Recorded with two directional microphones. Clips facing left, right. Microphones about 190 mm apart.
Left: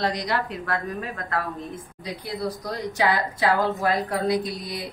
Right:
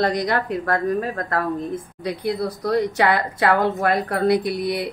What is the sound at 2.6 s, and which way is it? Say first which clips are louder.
A woman's voice: right 7 dB; 60° right (ahead or behind).